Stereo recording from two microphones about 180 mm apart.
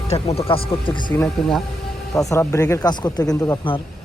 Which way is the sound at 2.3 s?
15° left (ahead or behind).